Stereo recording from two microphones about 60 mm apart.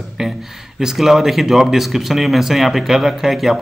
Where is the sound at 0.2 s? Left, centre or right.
Centre.